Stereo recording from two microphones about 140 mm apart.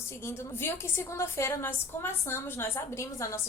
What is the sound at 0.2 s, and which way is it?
A woman's voice, 20° left (ahead or behind).